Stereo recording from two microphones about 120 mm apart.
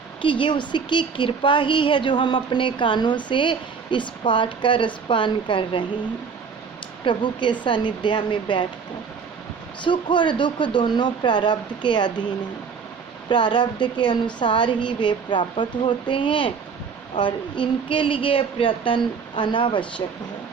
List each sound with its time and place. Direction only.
0.2 s a woman's voice: 45° left (ahead or behind)
7.0 s a woman's voice: 40° left (ahead or behind)
9.8 s a woman's voice: 40° left (ahead or behind)